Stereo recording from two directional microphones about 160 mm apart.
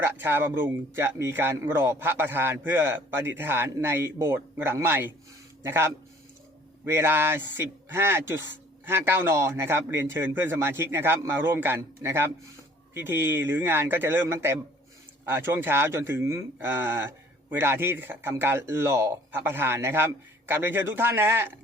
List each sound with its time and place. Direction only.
0.0 s speech: 15° right (ahead or behind)